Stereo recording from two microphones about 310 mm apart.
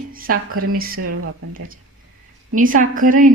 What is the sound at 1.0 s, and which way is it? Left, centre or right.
Speech, right.